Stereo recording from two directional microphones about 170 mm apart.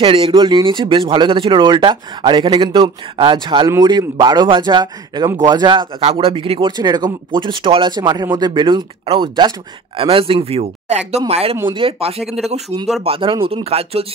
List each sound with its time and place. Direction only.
0.0 s speech: 30° right (ahead or behind)
12.2 s speech: centre (ahead or behind)
12.4 s speech: 40° right (ahead or behind)